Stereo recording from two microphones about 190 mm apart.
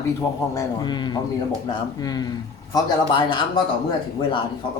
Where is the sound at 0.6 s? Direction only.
25° left (ahead or behind).